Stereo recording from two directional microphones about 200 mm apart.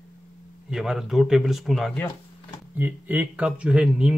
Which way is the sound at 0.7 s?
Centre (ahead or behind).